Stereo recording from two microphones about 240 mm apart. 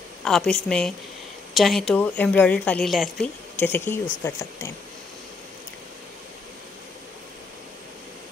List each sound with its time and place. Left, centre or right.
0.2 s a woman's voice: centre